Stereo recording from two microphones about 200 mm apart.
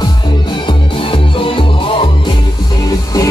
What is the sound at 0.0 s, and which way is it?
Music, 25° left (ahead or behind).